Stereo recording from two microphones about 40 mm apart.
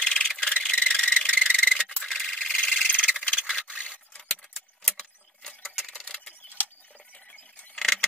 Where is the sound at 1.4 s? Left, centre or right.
Right.